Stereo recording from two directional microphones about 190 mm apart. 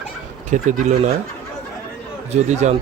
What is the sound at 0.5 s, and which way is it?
Speech, 40° right (ahead or behind).